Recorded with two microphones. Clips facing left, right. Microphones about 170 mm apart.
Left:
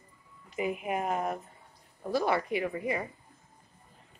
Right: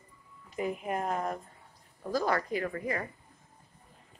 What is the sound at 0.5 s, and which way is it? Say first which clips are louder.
A woman's voice: left 1 dB; 5° left (ahead or behind).